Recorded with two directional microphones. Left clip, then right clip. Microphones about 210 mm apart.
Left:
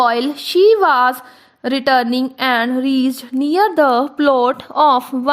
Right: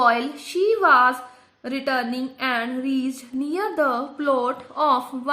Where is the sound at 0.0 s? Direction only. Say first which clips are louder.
Left 4 dB; 45° left (ahead or behind).